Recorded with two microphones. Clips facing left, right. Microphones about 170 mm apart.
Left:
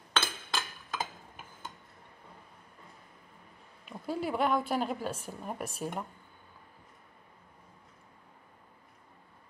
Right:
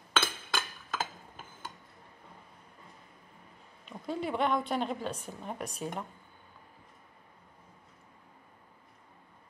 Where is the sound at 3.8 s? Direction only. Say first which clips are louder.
Left 1 dB; 5° left (ahead or behind).